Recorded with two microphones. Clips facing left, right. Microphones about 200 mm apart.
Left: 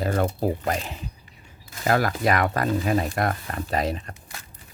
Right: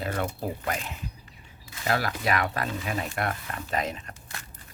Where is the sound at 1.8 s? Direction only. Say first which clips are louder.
Left 6 dB; 45° left (ahead or behind).